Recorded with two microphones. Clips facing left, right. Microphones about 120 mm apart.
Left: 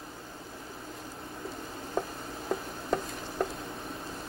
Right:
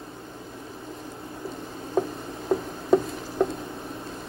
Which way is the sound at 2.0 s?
20° right (ahead or behind).